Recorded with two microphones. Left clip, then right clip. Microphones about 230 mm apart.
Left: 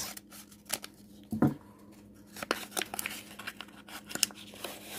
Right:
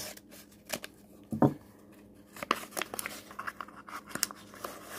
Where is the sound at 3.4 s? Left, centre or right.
Centre.